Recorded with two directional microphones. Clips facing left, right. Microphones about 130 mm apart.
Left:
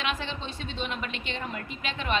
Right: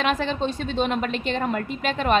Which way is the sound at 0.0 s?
45° right (ahead or behind).